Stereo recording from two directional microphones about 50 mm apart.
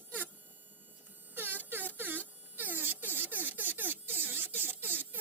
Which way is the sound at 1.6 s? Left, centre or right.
Right.